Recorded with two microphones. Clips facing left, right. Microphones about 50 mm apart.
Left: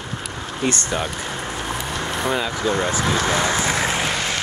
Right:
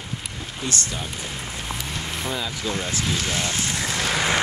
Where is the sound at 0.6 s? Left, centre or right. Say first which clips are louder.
Left 7 dB; left.